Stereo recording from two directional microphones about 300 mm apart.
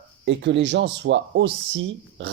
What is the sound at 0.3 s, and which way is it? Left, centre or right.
Speech, right.